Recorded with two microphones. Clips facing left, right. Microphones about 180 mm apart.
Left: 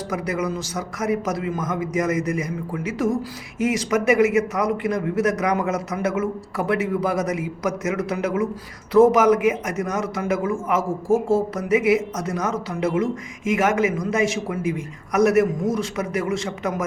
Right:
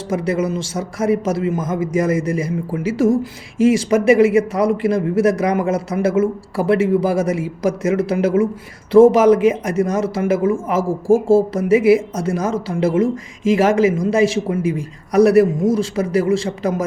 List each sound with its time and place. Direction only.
0.1 s a man's voice: 30° right (ahead or behind)